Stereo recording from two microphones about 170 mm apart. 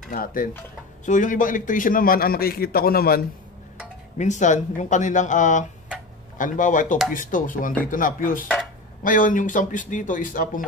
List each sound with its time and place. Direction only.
0.1 s a man's voice: 55° left (ahead or behind)
4.2 s speech: 45° left (ahead or behind)